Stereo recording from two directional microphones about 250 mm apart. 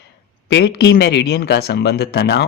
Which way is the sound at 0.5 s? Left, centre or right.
Left.